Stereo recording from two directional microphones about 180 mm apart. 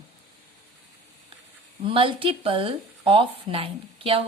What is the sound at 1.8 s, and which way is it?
Speech, 30° right (ahead or behind).